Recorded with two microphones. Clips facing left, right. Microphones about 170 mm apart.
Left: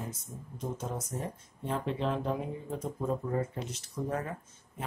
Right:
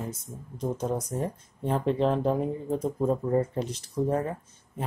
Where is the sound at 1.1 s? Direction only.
40° right (ahead or behind).